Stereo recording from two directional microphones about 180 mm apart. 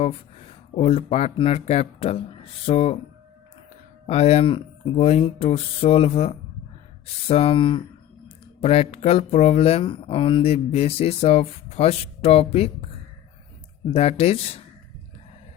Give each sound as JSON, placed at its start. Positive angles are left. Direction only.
{"t": 0.7, "sound": "speech", "side_deg": 35}
{"t": 4.0, "sound": "speech", "side_deg": 35}
{"t": 13.9, "sound": "speech", "side_deg": 35}